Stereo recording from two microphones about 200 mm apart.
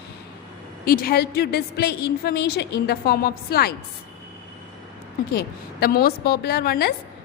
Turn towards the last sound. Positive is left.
turn(degrees=50)  # may be behind; listen again after turning